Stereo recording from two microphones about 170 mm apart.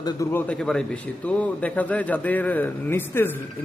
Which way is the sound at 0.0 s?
20° left (ahead or behind).